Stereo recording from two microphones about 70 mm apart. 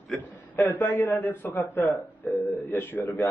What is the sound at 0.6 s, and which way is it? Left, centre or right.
A man's voice, left.